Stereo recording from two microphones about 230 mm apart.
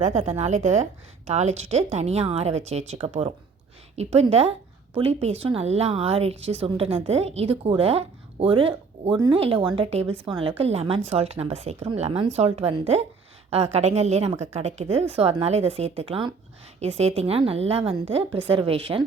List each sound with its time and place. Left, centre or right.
0.0 s speech: right